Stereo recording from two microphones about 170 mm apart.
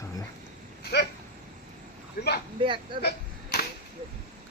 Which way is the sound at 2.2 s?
60° left (ahead or behind).